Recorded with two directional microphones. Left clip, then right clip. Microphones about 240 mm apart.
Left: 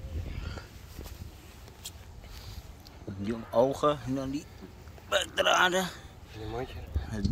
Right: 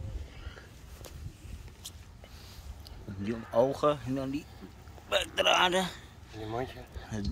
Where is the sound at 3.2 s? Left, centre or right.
Centre.